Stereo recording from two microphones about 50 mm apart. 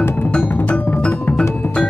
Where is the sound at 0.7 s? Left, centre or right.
Left.